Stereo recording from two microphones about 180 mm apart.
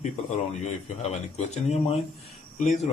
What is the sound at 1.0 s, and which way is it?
Speech, 35° left (ahead or behind).